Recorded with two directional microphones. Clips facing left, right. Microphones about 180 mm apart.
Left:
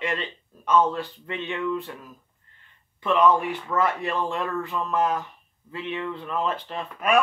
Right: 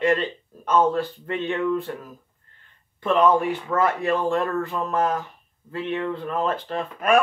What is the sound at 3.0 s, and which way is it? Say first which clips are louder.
Speech: right 2 dB; 45° right (ahead or behind).